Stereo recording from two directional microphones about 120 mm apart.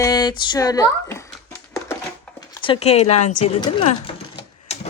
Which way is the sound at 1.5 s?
25° left (ahead or behind).